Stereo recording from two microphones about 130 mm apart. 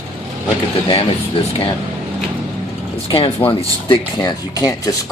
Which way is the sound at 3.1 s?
45° left (ahead or behind).